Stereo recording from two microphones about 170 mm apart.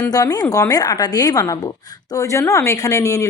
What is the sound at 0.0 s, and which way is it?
A woman's voice, 20° left (ahead or behind).